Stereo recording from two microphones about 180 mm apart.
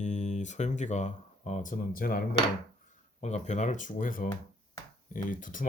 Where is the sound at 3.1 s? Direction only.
40° left (ahead or behind).